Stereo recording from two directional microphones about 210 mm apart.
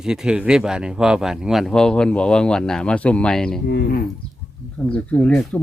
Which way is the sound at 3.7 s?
55° left (ahead or behind).